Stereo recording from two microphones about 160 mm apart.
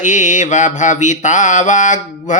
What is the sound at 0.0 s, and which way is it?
Mantra, 50° left (ahead or behind).